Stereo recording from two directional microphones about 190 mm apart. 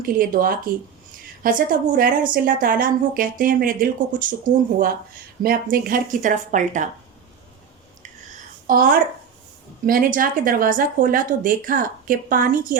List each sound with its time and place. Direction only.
0.0 s a woman's voice: 50° right (ahead or behind)
8.6 s a woman's voice: 50° right (ahead or behind)